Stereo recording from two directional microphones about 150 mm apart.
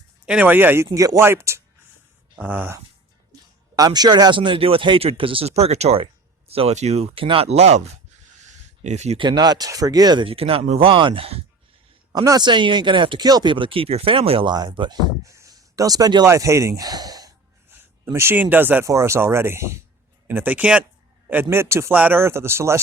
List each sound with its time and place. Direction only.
0.3 s speech: 10° right (ahead or behind)
3.8 s speech: 25° right (ahead or behind); by 7.8 s 45° right (ahead or behind)
8.4 s a sound: 50° right (ahead or behind)
9.1 s speech: 30° right (ahead or behind)
12.1 s speech: 25° right (ahead or behind)